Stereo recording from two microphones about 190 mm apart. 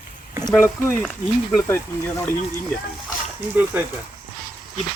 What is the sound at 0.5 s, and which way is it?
Speech, 10° left (ahead or behind).